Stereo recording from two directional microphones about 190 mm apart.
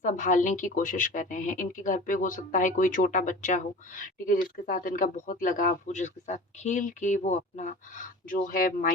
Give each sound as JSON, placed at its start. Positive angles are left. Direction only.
{"t": 0.0, "sound": "speech", "side_deg": 40}